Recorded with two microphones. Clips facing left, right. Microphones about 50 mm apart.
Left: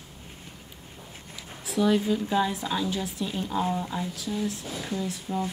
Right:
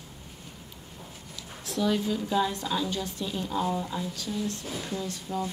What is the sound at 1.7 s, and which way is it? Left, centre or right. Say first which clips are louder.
A woman's voice: left 4 dB; centre.